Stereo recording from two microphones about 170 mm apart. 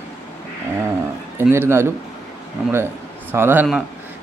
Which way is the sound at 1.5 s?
15° right (ahead or behind).